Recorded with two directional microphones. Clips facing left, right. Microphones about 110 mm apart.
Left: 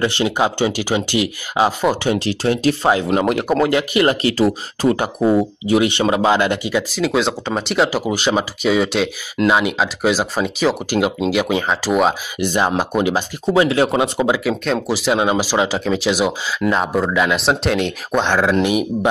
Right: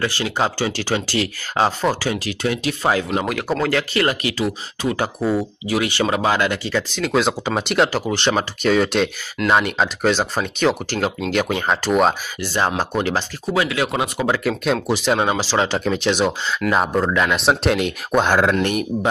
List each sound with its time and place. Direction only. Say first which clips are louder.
0.0 s speech: left 4 dB; 20° left (ahead or behind)
2.0 s speech: left 4 dB; 30° left (ahead or behind)
4.9 s speech: left 2 dB; 20° left (ahead or behind)
6.9 s speech: right 1 dB; 5° left (ahead or behind)
12.4 s speech: left 3 dB; 15° left (ahead or behind)
13.5 s speech: left 6 dB; 25° left (ahead or behind)
14.6 s speech: even; centre (ahead or behind)
15.1 s speech: left 2 dB; 10° left (ahead or behind)